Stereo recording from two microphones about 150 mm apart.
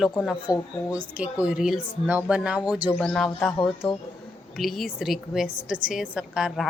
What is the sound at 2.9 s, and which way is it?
Speech, 5° left (ahead or behind).